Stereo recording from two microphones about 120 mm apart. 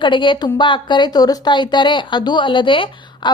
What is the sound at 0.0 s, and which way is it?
A woman's voice, 40° left (ahead or behind).